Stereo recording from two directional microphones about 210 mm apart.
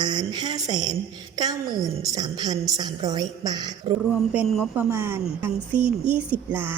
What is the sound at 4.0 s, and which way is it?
A woman's voice, 5° right (ahead or behind).